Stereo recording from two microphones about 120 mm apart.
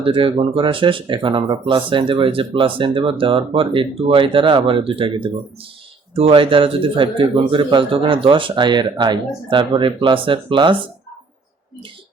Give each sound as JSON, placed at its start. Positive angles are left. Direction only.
{"t": 0.0, "sound": "speech", "side_deg": -45}